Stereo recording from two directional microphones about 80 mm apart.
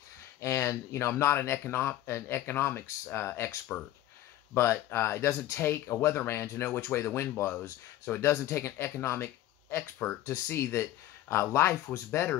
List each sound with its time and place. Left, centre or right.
0.4 s speech: left
4.8 s speech: left